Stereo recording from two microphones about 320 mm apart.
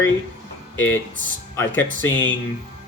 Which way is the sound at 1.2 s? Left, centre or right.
Right.